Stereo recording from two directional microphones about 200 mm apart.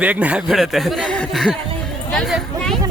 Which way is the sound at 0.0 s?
5° right (ahead or behind).